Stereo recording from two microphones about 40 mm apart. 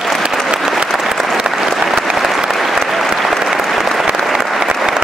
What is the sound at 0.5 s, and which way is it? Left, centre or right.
Applause, centre.